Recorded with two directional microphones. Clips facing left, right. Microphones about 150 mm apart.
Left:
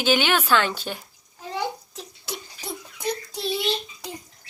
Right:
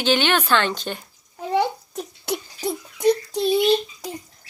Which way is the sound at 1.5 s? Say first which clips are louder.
Right 8 dB; 60° right (ahead or behind).